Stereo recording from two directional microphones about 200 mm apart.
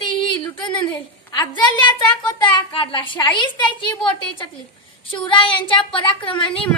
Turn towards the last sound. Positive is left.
turn(degrees=25)  # may be behind; listen again after turning